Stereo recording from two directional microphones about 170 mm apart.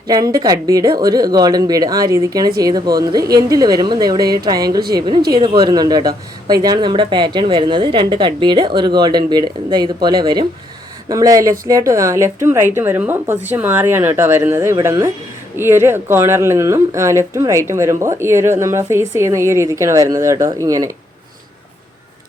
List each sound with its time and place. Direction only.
0.1 s a woman's voice: 20° right (ahead or behind)